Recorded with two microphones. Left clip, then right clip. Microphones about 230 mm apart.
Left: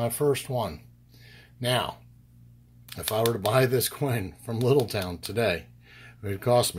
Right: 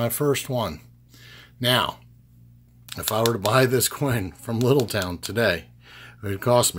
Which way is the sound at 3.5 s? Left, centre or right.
Right.